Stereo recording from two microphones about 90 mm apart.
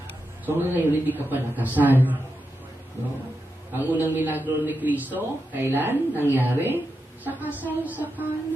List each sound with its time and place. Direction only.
0.4 s a man's voice: 20° right (ahead or behind)
3.8 s a man's voice: 20° right (ahead or behind)